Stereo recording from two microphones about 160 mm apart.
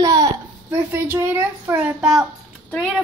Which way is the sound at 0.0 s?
20° right (ahead or behind).